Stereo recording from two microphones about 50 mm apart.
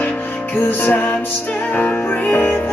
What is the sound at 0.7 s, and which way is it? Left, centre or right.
Music, left.